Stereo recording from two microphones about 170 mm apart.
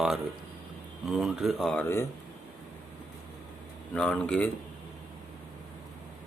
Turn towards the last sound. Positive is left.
turn(degrees=5)  # may be behind; listen again after turning